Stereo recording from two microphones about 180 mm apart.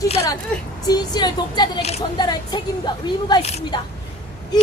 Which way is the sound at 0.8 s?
20° left (ahead or behind).